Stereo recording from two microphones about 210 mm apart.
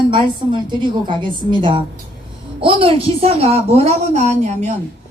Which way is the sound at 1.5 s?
25° right (ahead or behind).